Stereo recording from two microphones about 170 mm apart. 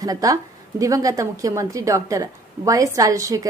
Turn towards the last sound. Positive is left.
turn(degrees=-20)  # may be behind; listen again after turning